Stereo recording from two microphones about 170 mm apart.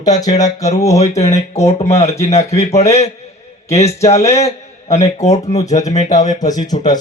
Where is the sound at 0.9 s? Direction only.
40° left (ahead or behind).